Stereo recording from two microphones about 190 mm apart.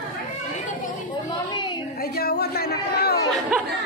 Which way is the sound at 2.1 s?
55° left (ahead or behind).